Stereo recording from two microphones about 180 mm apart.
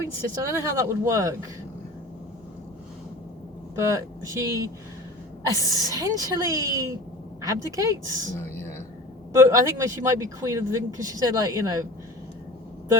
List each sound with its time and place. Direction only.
0.0 s speech: 15° right (ahead or behind)
3.8 s speech: 15° right (ahead or behind)
5.9 s a woman's voice: 20° right (ahead or behind)
9.3 s speech: 15° right (ahead or behind)